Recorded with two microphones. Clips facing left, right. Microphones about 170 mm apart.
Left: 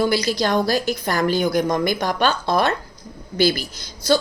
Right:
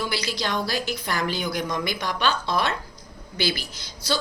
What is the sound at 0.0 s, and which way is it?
A woman's voice, 45° left (ahead or behind).